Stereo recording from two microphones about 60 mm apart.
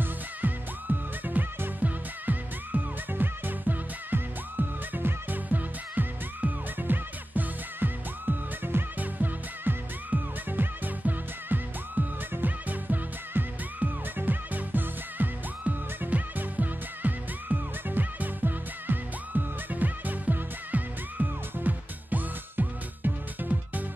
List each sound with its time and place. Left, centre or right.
0.4 s music: right